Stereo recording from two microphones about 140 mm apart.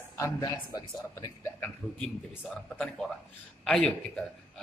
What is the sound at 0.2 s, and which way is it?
Speech, 20° left (ahead or behind).